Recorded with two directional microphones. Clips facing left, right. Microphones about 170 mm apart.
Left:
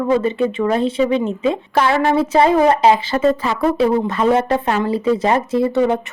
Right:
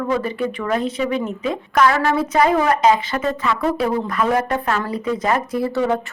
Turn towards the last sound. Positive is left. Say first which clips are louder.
# left 4 dB
turn(degrees=25)  # may be behind; listen again after turning